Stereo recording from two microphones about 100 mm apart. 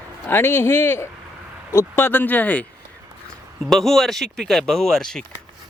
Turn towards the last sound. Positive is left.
turn(degrees=5)  # may be behind; listen again after turning